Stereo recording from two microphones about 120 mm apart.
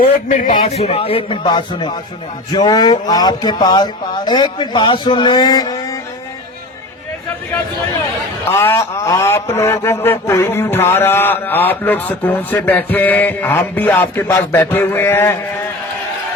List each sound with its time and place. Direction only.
0.3 s speech: 90° left; by 6.0 s 30° left (ahead or behind)
8.5 s speech: 20° left (ahead or behind)